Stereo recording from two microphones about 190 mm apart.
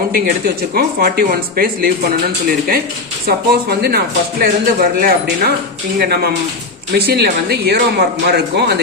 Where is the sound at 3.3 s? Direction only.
55° right (ahead or behind).